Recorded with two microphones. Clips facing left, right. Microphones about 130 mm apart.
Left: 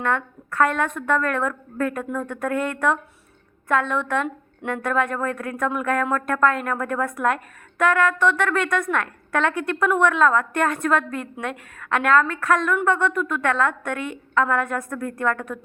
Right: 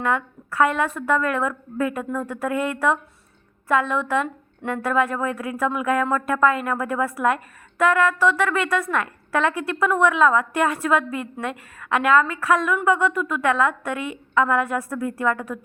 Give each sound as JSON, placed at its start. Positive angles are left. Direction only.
{"t": 0.0, "sound": "a woman's voice", "side_deg": -5}